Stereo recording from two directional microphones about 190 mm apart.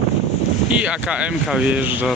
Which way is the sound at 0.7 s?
5° right (ahead or behind).